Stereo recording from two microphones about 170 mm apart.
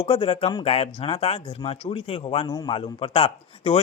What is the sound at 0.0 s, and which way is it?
Speech, 30° left (ahead or behind).